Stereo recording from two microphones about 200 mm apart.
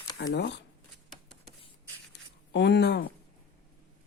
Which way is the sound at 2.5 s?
60° left (ahead or behind).